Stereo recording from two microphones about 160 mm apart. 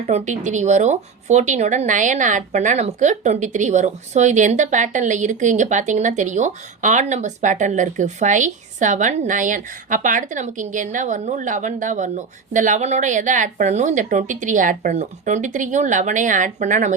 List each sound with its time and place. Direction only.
0.1 s speech: 50° right (ahead or behind)